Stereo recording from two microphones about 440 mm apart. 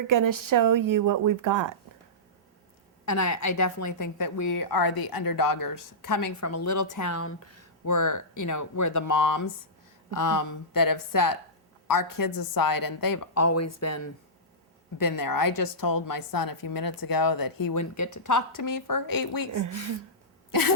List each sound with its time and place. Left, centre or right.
0.1 s speech: right
3.1 s a woman's voice: left
14.9 s a woman's voice: left
19.5 s a woman's voice: right
20.5 s throat clearing: left